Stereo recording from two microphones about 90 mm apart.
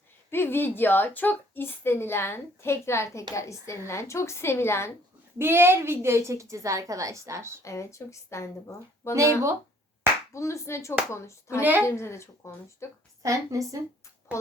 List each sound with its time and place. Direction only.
0.3 s a woman's voice: 25° left (ahead or behind)
5.4 s a woman's voice: 25° right (ahead or behind)
7.6 s a woman's voice: 35° left (ahead or behind)
10.3 s a woman's voice: 35° left (ahead or behind)
11.6 s a woman's voice: 20° right (ahead or behind)
11.9 s a woman's voice: 30° left (ahead or behind)
13.2 s a woman's voice: 35° right (ahead or behind)
14.3 s a woman's voice: 15° right (ahead or behind)